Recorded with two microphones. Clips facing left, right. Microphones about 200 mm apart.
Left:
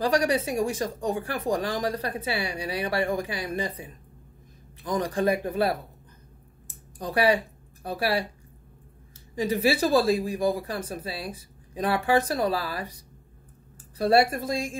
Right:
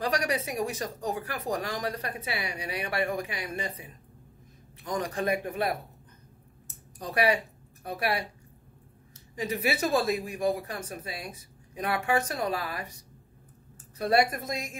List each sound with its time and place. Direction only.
0.0 s speech: 30° left (ahead or behind)
6.7 s a sound: 30° left (ahead or behind)
9.3 s a woman's voice: 30° left (ahead or behind)